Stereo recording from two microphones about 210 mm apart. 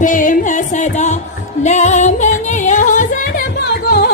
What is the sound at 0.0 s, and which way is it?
Music, 40° left (ahead or behind).